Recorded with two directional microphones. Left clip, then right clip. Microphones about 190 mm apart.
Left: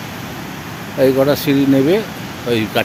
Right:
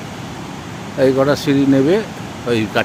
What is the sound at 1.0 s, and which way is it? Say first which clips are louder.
Speech: left 1 dB; 5° left (ahead or behind).